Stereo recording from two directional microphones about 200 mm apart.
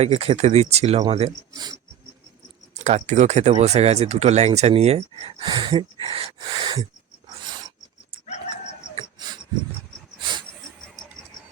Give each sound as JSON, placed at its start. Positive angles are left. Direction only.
{"t": 0.0, "sound": "speech", "side_deg": -30}
{"t": 2.7, "sound": "speech", "side_deg": -35}
{"t": 9.1, "sound": "wheeze", "side_deg": -20}